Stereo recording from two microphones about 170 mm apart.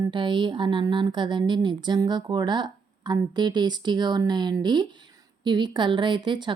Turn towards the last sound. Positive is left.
turn(degrees=-25)  # may be behind; listen again after turning